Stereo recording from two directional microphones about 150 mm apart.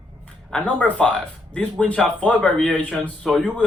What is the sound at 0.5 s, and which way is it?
A man's voice, 5° left (ahead or behind).